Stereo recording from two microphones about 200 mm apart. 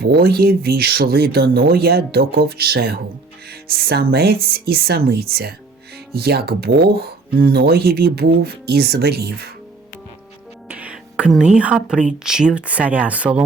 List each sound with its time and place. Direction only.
0.0 s speech: 50° right (ahead or behind)
10.7 s speech: 5° right (ahead or behind)